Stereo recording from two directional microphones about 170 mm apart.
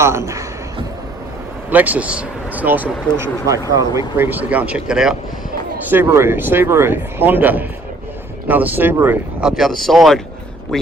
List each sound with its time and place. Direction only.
0.0 s speech: 15° right (ahead or behind)
1.7 s speech: 10° right (ahead or behind)